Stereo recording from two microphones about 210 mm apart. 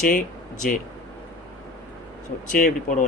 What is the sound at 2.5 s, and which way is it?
Speech, 40° left (ahead or behind).